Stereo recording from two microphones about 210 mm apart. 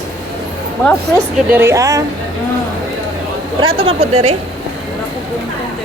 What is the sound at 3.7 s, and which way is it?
Speech, 30° right (ahead or behind).